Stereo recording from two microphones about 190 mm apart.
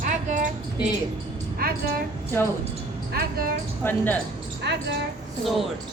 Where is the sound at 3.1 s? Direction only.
55° right (ahead or behind).